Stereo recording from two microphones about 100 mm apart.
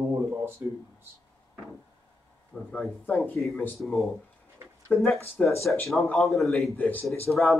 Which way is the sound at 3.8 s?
Centre (ahead or behind).